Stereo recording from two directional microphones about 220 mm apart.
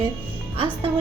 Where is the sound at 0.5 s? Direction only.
25° right (ahead or behind).